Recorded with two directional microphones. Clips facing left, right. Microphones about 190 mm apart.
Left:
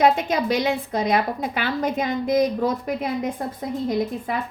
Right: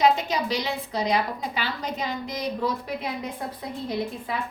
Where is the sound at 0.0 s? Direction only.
50° left (ahead or behind).